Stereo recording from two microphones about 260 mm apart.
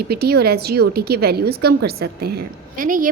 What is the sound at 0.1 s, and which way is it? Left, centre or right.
A woman's voice, right.